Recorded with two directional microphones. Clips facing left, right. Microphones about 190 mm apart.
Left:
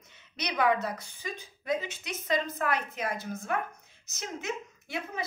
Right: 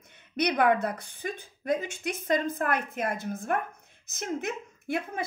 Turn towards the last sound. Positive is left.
turn(degrees=-50)  # may be behind; listen again after turning